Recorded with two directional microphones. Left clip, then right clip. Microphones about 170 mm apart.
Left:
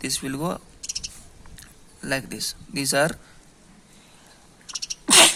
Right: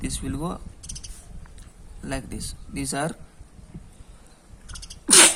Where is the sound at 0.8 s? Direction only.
30° left (ahead or behind).